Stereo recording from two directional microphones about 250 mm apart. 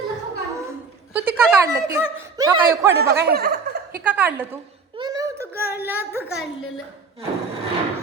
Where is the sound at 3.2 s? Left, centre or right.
Right.